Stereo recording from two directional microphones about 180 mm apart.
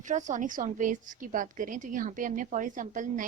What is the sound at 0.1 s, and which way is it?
Speech, 45° right (ahead or behind).